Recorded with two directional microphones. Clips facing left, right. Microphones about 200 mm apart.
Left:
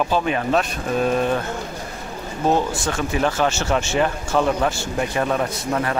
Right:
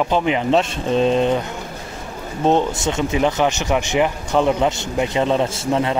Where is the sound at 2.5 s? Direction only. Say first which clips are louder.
Right 3 dB; 20° right (ahead or behind).